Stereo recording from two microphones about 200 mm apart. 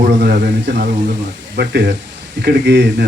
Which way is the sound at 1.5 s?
55° right (ahead or behind).